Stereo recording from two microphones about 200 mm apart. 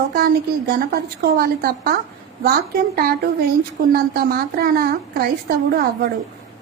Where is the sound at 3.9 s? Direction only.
50° right (ahead or behind).